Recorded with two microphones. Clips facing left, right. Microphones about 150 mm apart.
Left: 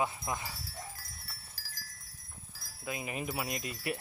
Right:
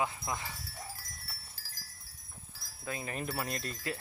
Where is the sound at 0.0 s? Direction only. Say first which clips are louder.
Left 1 dB; 20° left (ahead or behind).